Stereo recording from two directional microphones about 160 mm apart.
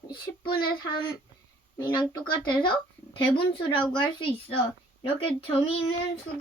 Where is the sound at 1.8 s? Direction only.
30° left (ahead or behind).